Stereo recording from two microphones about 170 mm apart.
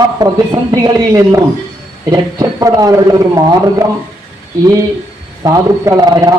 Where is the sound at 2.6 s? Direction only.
20° right (ahead or behind).